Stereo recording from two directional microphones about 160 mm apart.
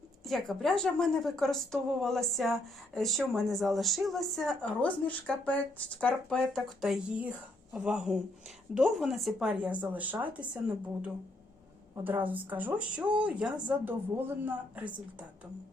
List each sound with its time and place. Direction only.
0.3 s a woman's voice: centre (ahead or behind)
12.0 s speech: 10° right (ahead or behind)